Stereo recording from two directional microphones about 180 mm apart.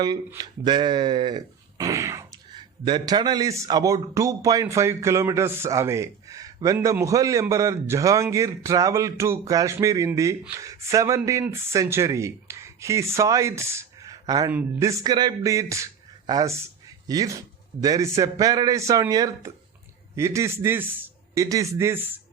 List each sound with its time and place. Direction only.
0.3 s a man's voice: 25° right (ahead or behind)